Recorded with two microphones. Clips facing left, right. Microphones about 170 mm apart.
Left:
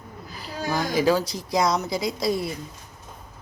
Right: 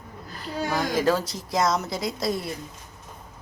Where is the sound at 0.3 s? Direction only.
5° left (ahead or behind).